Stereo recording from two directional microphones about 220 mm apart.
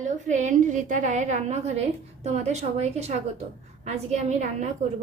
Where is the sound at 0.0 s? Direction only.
35° right (ahead or behind).